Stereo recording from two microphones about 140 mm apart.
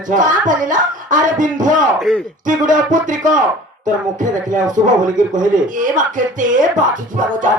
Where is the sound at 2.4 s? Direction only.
70° right (ahead or behind).